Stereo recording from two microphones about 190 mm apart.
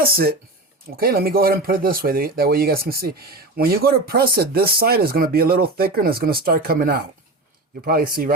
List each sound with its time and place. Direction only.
0.0 s speech: 50° right (ahead or behind)